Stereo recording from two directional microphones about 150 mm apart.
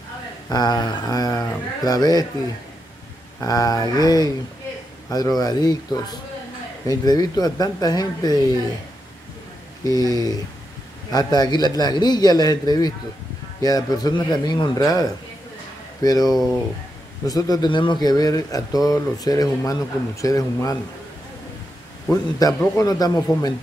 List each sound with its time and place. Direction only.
0.5 s a man's voice: 25° left (ahead or behind)
3.3 s a man's voice: 25° left (ahead or behind)
5.4 s a man's voice: 25° left (ahead or behind)
9.8 s a man's voice: 25° left (ahead or behind)
22.1 s a man's voice: 25° left (ahead or behind)